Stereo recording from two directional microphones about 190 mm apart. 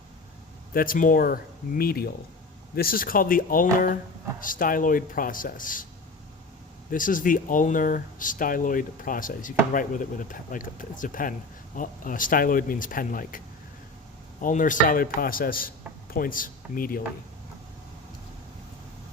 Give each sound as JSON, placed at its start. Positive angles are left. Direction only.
{"t": 0.7, "sound": "speech", "side_deg": 50}
{"t": 6.9, "sound": "speech", "side_deg": 45}
{"t": 14.4, "sound": "speech", "side_deg": 45}